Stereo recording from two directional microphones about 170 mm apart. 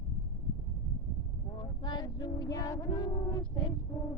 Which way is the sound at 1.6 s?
25° left (ahead or behind).